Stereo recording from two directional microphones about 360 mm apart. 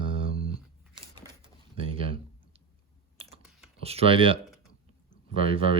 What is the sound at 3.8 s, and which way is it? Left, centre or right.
Speech, centre.